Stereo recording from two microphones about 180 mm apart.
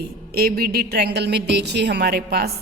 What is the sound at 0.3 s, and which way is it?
A woman's voice, 60° right (ahead or behind).